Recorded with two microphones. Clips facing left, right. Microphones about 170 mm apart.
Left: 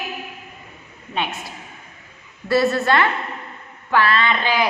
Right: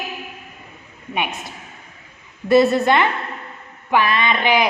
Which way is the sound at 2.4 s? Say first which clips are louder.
Right 4 dB; 20° right (ahead or behind).